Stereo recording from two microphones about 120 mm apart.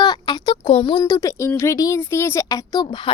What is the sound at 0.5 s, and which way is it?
Speech, 55° left (ahead or behind).